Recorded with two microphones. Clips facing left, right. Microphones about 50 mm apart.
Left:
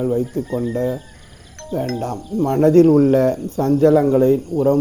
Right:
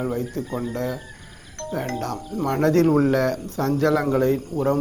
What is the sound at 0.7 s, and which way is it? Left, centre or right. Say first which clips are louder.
Speech: left 7 dB; right.